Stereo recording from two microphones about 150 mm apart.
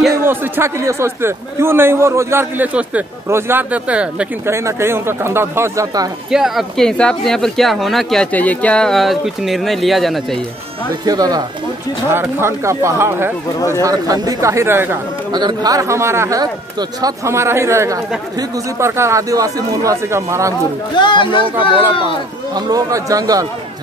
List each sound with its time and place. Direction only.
0.1 s speech: 15° right (ahead or behind)
6.3 s speech: centre (ahead or behind)
11.1 s speech: 25° right (ahead or behind)
15.3 s speech: 25° right (ahead or behind)
20.9 s speech: 30° left (ahead or behind)
22.5 s speech: 25° right (ahead or behind)